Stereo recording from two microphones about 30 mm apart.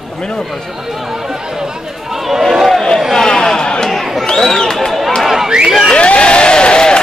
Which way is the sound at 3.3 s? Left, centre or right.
Centre.